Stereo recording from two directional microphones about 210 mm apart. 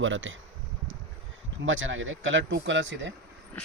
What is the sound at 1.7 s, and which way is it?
Speech, 65° right (ahead or behind).